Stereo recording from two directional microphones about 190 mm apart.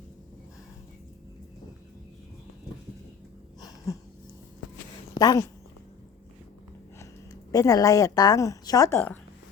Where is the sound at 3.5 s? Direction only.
20° left (ahead or behind).